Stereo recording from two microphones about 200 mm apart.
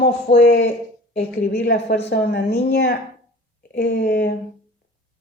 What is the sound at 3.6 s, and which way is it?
Speech, 60° left (ahead or behind).